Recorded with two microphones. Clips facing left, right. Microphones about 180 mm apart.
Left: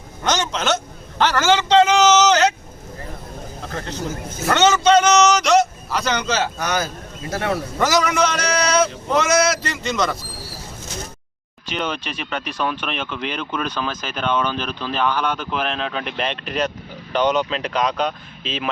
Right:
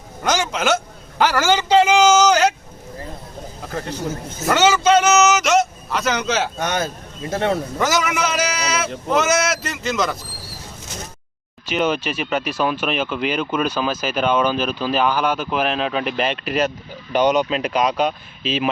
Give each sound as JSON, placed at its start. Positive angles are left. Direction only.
{"t": 0.3, "sound": "speech", "side_deg": -10}
{"t": 3.7, "sound": "a man's voice", "side_deg": -5}
{"t": 6.6, "sound": "speech", "side_deg": -25}
{"t": 7.8, "sound": "a man's voice", "side_deg": 0}
{"t": 11.7, "sound": "speech", "side_deg": -5}